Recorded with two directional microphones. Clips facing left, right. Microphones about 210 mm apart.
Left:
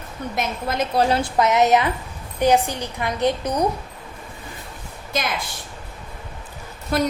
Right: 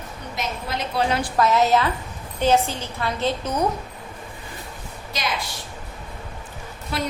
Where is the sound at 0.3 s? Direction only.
50° left (ahead or behind).